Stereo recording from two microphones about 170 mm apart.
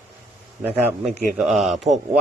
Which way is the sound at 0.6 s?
10° right (ahead or behind).